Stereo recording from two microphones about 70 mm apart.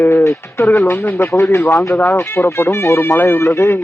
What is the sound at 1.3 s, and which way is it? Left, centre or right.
Speech, left.